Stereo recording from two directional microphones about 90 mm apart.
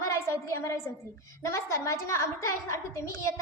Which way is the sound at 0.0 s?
35° left (ahead or behind).